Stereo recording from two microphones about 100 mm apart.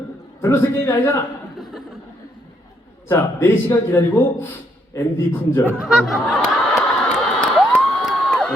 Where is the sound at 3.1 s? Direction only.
20° left (ahead or behind).